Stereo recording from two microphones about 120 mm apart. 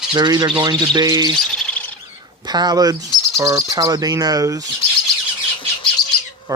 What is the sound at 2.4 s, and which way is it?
Speech, 35° right (ahead or behind).